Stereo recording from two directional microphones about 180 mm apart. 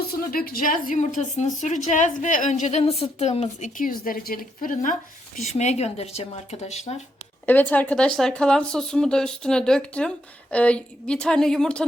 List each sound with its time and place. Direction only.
0.3 s a woman's voice: 55° left (ahead or behind); by 3.7 s 35° left (ahead or behind)
3.8 s a woman's voice: 50° left (ahead or behind)
7.4 s speech: 10° left (ahead or behind)